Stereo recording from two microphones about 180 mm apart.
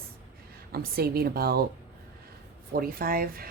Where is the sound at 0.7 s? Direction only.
60° right (ahead or behind).